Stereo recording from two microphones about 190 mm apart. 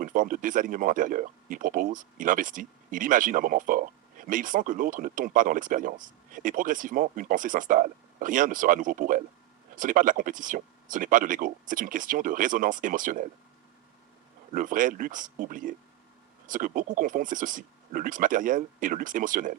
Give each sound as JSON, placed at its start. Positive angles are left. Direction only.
{"t": 0.0, "sound": "speech", "side_deg": -45}
{"t": 14.5, "sound": "speech", "side_deg": -45}